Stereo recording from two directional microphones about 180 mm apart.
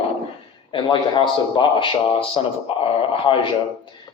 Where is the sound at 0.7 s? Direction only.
25° left (ahead or behind).